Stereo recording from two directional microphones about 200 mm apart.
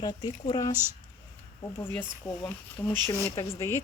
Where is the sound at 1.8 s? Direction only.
5° left (ahead or behind).